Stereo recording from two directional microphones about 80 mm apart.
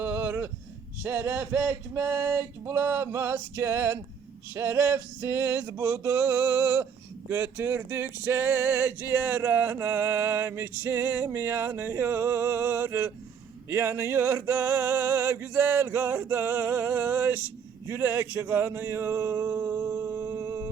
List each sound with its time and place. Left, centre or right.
0.0 s a sound: right
1.0 s male singing: right
5.9 s male singing: right
6.2 s a sound: centre
7.3 s male singing: centre
17.8 s speech: right